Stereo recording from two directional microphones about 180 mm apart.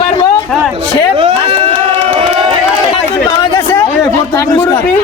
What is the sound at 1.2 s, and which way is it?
Run, 30° right (ahead or behind).